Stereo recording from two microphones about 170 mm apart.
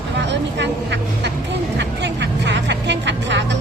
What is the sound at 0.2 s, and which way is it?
Vehicle, 90° right.